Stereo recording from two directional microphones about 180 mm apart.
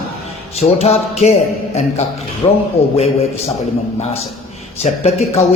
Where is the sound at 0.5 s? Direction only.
35° left (ahead or behind).